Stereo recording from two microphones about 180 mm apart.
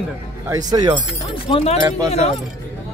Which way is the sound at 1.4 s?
35° left (ahead or behind).